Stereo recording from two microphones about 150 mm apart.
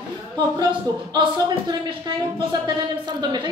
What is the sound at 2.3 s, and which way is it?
A woman's voice, 30° right (ahead or behind).